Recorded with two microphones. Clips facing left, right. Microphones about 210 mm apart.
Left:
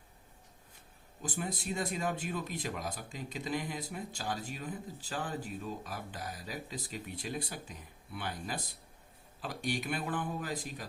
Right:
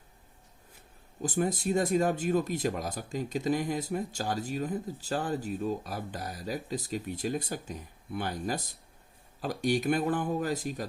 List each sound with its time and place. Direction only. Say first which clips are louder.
1.2 s speech: right 9 dB; 45° right (ahead or behind)